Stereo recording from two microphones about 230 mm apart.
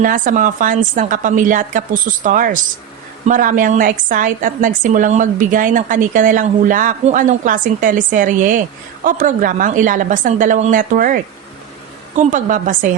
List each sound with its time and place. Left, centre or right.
0.0 s a woman's voice: right